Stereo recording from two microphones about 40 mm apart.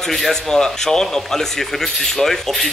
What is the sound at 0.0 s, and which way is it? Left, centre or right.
Speech, centre.